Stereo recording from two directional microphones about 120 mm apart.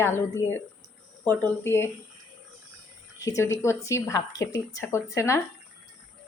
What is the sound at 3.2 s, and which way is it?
Speech, 25° left (ahead or behind).